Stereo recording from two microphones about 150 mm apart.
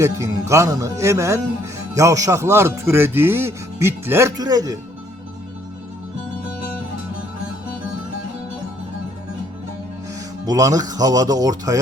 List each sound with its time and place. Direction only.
0.0 s speech: 20° right (ahead or behind)
10.4 s speech: 25° right (ahead or behind)